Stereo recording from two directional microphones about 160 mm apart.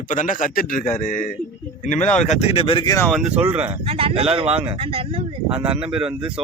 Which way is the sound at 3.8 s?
35° right (ahead or behind).